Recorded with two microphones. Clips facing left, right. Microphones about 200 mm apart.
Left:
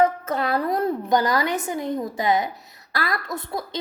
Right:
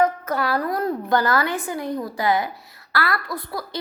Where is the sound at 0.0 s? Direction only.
25° left (ahead or behind).